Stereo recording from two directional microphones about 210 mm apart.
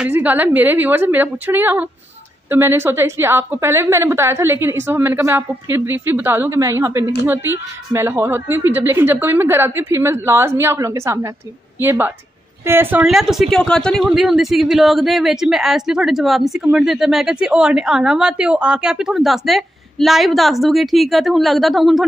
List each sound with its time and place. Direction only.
0.0 s a woman's voice: 5° right (ahead or behind)